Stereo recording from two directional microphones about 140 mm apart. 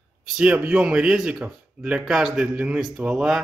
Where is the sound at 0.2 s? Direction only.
5° right (ahead or behind).